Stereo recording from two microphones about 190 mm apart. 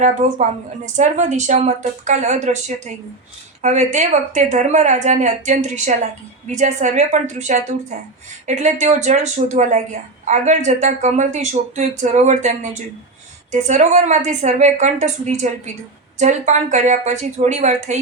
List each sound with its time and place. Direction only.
0.0 s a woman's voice: 40° right (ahead or behind)